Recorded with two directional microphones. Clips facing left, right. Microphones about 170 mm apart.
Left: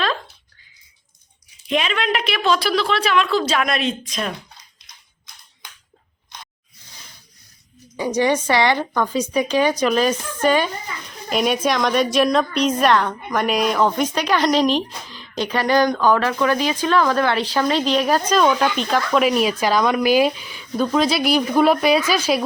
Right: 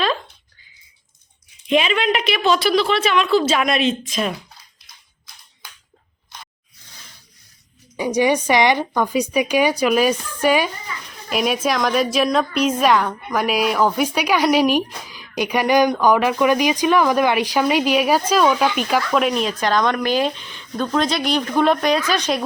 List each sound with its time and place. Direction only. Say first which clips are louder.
1.7 s a woman's voice: right 3 dB; centre (ahead or behind)
7.9 s a woman's voice: right 1 dB; 15° right (ahead or behind); by 22.4 s 5° left (ahead or behind)